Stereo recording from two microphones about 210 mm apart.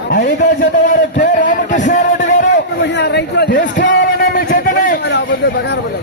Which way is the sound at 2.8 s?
55° left (ahead or behind).